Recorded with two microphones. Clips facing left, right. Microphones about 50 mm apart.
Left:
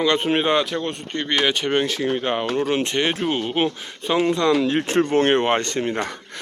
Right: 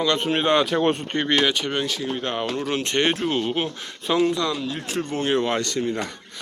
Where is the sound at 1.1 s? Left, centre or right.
Centre.